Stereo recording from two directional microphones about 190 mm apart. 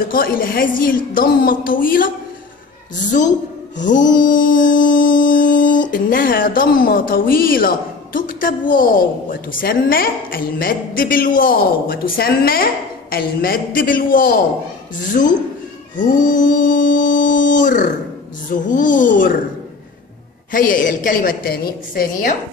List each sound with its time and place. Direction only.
0.1 s a woman's voice: 50° left (ahead or behind)
3.7 s mantra: 40° left (ahead or behind)
9.3 s a woman's voice: 45° left (ahead or behind)
16.0 s mantra: 45° left (ahead or behind)
18.5 s a woman's voice: 45° left (ahead or behind)
20.5 s a woman's voice: 45° left (ahead or behind)